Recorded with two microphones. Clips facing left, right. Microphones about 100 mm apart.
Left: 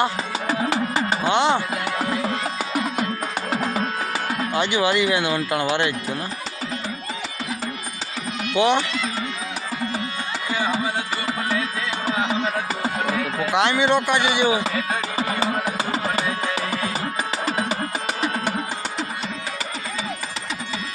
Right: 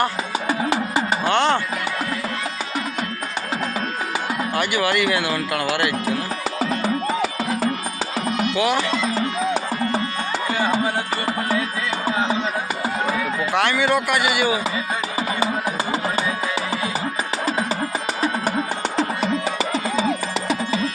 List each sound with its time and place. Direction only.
0.7 s music: 20° right (ahead or behind)
1.2 s music: 15° left (ahead or behind)
3.5 s music: 10° left (ahead or behind)
4.5 s speech: 20° left (ahead or behind)
6.6 s music: 60° right (ahead or behind)
8.5 s speech: 25° left (ahead or behind)
13.5 s speech: 20° left (ahead or behind)
15.4 s music: 20° right (ahead or behind)